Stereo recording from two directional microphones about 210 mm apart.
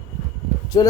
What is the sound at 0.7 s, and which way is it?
Speech, 20° left (ahead or behind).